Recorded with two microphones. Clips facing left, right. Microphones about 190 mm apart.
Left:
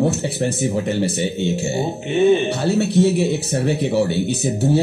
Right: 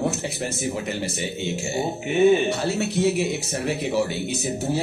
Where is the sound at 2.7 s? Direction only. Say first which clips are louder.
Left 6 dB; 35° left (ahead or behind).